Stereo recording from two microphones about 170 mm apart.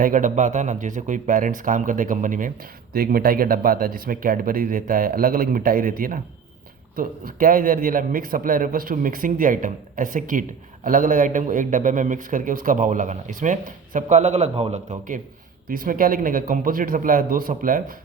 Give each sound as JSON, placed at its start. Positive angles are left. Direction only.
{"t": 0.0, "sound": "a man's voice", "side_deg": -50}